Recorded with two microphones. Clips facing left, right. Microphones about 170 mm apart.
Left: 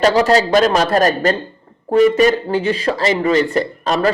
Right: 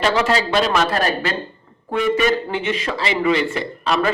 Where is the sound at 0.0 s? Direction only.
40° left (ahead or behind).